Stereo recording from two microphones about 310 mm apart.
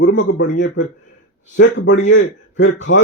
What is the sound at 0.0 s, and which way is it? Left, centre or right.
A man's voice, left.